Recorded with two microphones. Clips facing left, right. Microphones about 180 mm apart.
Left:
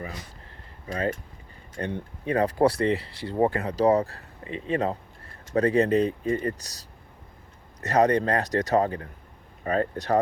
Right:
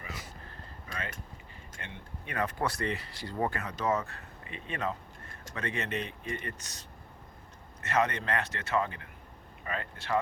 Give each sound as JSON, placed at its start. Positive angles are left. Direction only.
{"t": 0.9, "sound": "speech", "side_deg": 35}